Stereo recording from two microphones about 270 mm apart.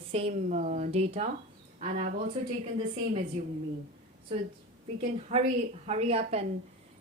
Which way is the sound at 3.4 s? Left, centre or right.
Right.